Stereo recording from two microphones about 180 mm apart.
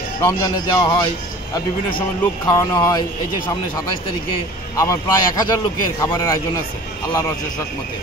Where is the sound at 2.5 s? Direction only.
20° left (ahead or behind).